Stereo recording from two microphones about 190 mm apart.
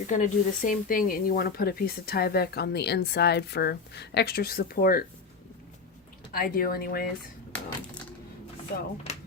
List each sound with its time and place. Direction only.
0.1 s speech: 40° left (ahead or behind)
6.3 s speech: 50° left (ahead or behind)
9.1 s a sound: 35° left (ahead or behind)